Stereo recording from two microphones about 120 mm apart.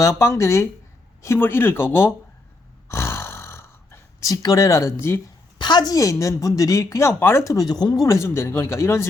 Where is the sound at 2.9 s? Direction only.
25° left (ahead or behind).